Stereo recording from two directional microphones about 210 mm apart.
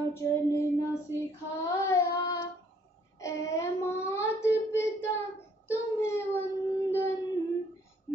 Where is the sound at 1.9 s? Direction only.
15° left (ahead or behind).